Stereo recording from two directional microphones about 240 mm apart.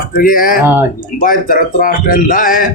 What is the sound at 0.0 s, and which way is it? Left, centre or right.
A man's voice, left.